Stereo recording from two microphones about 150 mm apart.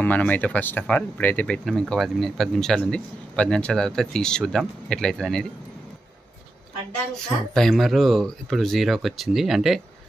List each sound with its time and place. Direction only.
0.0 s a man's voice: 10° left (ahead or behind)
7.5 s a man's voice: 5° left (ahead or behind)